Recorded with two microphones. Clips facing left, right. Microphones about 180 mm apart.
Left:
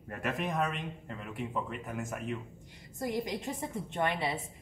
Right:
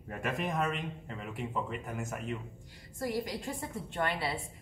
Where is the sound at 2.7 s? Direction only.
20° left (ahead or behind).